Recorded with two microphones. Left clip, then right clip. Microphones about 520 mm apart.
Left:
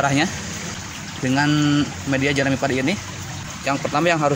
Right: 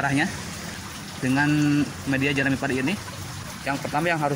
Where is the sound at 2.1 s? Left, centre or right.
Right.